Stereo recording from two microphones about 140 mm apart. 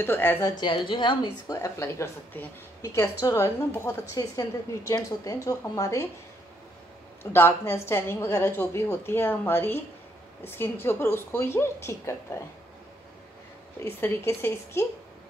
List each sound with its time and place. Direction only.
0.0 s a woman's voice: 15° left (ahead or behind)
7.3 s a woman's voice: 15° left (ahead or behind)
13.7 s a woman's voice: 20° left (ahead or behind)